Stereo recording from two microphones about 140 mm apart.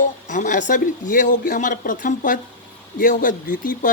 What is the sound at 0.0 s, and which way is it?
Speech, 65° left (ahead or behind).